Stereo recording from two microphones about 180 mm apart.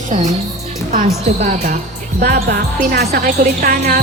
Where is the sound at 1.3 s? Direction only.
40° right (ahead or behind).